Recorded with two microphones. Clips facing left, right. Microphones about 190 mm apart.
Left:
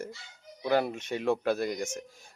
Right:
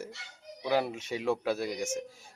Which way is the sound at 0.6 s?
5° right (ahead or behind).